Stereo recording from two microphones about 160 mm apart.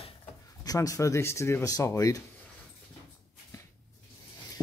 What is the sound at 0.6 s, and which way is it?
Speech, 20° left (ahead or behind).